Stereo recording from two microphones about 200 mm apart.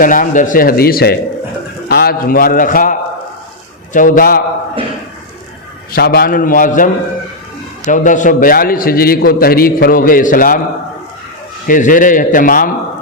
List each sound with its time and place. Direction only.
0.0 s a man's voice: 40° left (ahead or behind)
5.9 s a man's voice: 50° left (ahead or behind)
11.7 s a man's voice: 40° left (ahead or behind)